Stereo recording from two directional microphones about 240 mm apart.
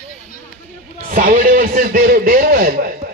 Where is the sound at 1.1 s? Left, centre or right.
Right.